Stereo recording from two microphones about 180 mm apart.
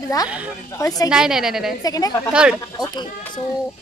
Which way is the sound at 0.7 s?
20° left (ahead or behind).